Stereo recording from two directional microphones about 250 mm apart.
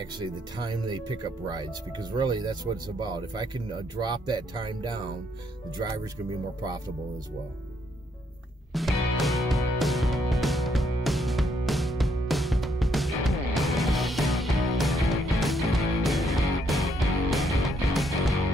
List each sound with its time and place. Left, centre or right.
0.0 s speech: centre
8.7 s music: centre